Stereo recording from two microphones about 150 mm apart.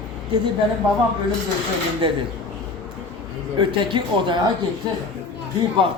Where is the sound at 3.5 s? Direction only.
30° right (ahead or behind).